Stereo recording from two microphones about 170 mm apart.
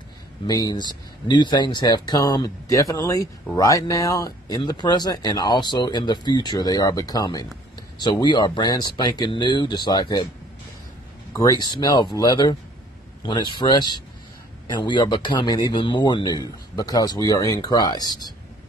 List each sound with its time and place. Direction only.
0.5 s speech: 20° left (ahead or behind)
11.3 s speech: 25° left (ahead or behind)